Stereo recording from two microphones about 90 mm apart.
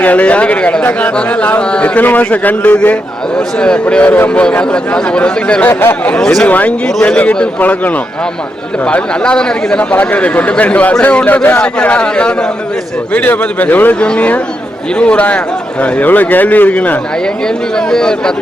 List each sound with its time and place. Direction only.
0.0 s a man's voice: 15° left (ahead or behind)
5.6 s speech: 20° left (ahead or behind)
6.1 s a man's voice: 10° left (ahead or behind)
17.7 s a man's voice: 5° left (ahead or behind)